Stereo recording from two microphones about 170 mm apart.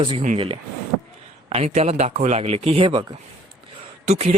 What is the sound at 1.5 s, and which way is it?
Speech, 40° right (ahead or behind).